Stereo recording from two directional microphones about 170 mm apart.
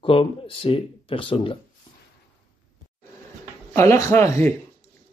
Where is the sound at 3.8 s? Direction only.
15° left (ahead or behind).